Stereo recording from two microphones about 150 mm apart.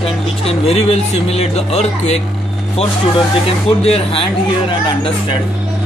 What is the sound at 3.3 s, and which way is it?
Speech, 40° left (ahead or behind).